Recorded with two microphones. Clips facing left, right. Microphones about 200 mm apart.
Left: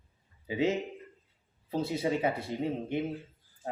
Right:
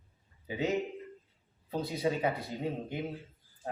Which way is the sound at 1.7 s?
25° left (ahead or behind).